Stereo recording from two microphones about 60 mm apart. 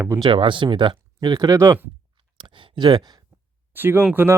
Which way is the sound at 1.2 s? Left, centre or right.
Right.